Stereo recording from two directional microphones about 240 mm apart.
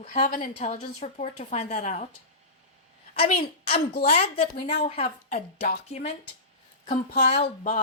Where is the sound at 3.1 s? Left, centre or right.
Left.